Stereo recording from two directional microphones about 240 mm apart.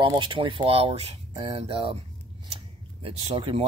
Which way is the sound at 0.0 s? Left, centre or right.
Right.